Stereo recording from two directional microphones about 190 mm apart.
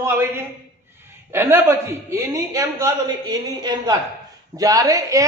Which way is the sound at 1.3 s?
10° right (ahead or behind).